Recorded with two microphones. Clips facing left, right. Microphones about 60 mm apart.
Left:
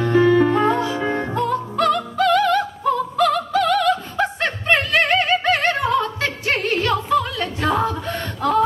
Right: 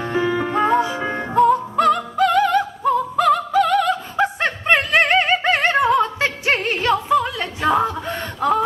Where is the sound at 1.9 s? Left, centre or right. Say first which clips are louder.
Left 1 dB; centre.